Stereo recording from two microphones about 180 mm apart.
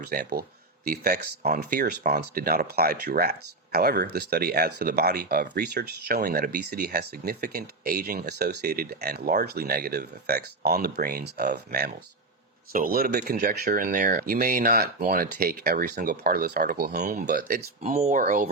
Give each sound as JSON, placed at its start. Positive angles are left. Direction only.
{"t": 0.1, "sound": "speech", "side_deg": -55}
{"t": 12.7, "sound": "speech", "side_deg": -50}
{"t": 17.0, "sound": "speech", "side_deg": -45}
{"t": 17.9, "sound": "speech", "side_deg": -40}